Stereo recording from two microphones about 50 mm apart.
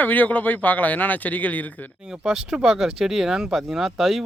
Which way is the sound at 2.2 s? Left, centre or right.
Centre.